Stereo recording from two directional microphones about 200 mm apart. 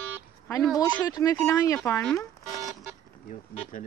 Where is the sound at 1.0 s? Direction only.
20° left (ahead or behind).